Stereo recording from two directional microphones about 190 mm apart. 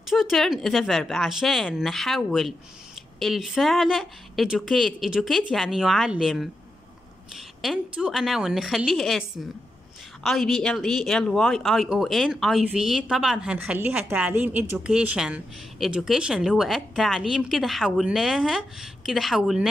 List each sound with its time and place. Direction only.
0.1 s speech: centre (ahead or behind)
7.6 s speech: 5° right (ahead or behind)